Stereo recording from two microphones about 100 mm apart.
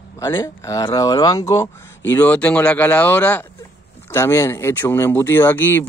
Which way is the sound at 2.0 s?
20° left (ahead or behind).